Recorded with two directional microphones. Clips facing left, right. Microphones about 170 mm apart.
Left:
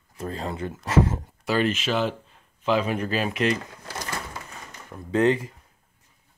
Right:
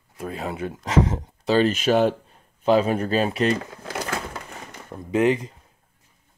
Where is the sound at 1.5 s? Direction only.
40° right (ahead or behind).